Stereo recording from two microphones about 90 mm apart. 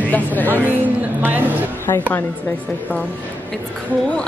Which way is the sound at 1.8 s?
25° left (ahead or behind).